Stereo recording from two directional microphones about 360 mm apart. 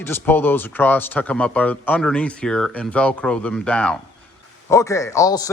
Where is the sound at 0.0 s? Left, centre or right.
Centre.